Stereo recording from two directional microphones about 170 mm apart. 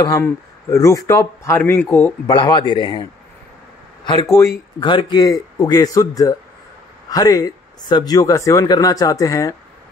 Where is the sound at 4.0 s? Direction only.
25° left (ahead or behind).